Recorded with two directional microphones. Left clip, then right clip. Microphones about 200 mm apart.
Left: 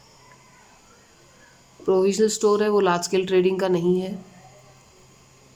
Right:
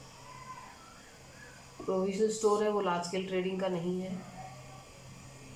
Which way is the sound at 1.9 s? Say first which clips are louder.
Left 11 dB; 50° left (ahead or behind).